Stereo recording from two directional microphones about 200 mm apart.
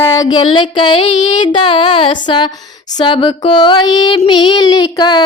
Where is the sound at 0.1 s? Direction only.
20° left (ahead or behind).